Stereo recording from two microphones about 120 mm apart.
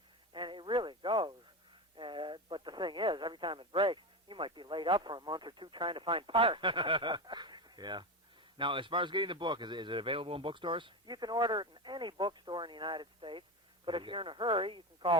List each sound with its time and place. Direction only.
0.3 s radio: 40° right (ahead or behind)
8.5 s speech: 45° right (ahead or behind)